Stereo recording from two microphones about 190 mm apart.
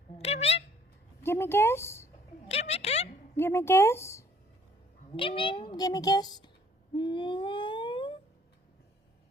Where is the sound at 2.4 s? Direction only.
35° left (ahead or behind).